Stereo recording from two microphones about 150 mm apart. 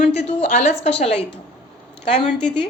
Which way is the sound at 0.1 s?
45° left (ahead or behind).